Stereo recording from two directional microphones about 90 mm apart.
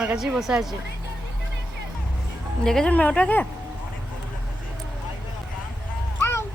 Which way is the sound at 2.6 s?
5° left (ahead or behind).